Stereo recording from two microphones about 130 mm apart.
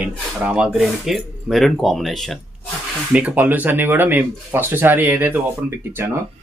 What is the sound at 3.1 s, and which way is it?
Speech, 10° right (ahead or behind).